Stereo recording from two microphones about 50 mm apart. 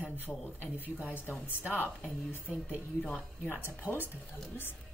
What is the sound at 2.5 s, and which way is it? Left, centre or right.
Speech, right.